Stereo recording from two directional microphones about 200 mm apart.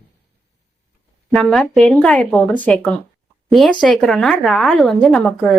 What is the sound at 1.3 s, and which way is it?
Speech, centre (ahead or behind).